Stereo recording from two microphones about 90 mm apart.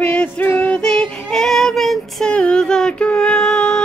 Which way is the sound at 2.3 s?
10° left (ahead or behind).